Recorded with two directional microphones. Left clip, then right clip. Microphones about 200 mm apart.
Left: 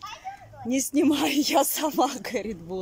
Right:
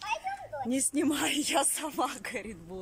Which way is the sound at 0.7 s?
10° left (ahead or behind).